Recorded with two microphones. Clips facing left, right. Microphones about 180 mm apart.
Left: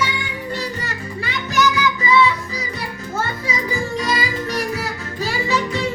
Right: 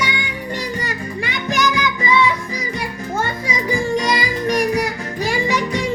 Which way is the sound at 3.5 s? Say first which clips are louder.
Right 6 dB; 15° right (ahead or behind).